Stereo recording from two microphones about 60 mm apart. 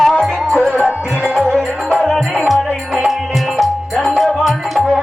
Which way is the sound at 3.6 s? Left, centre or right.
Centre.